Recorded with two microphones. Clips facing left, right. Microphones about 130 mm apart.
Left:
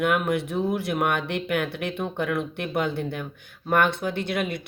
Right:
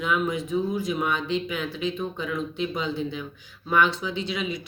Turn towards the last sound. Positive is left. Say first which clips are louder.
# left 2 dB
turn(degrees=60)  # may be behind; listen again after turning